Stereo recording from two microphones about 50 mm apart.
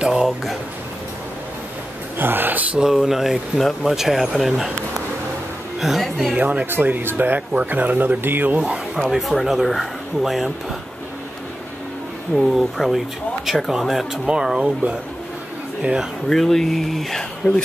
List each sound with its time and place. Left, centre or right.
0.0 s a sound: centre
2.1 s speech: right
2.8 s speech: centre
5.8 s speech: centre
6.3 s speech: right
6.6 s speech: right
9.1 s speech: centre
12.4 s speech: centre
14.6 s speech: right
16.3 s speech: centre